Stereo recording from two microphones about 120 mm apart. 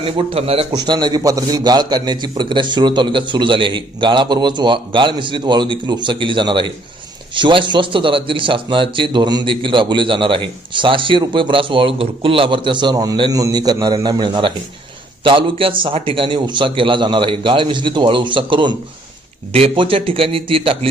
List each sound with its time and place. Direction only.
0.0 s speech: 50° right (ahead or behind)
0.7 s a man's voice: 35° right (ahead or behind)